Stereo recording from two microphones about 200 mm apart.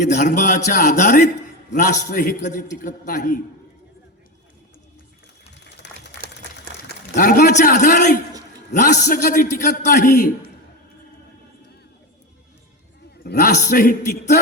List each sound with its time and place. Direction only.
0.1 s a man's voice: 40° left (ahead or behind)
5.5 s a sound: 60° left (ahead or behind)
7.2 s a man's voice: 40° left (ahead or behind)
13.2 s a man's voice: 45° left (ahead or behind)